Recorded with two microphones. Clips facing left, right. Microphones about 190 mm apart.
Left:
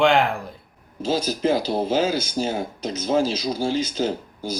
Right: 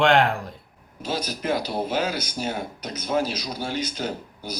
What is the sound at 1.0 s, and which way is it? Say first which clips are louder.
Speech: left 6 dB; 25° left (ahead or behind).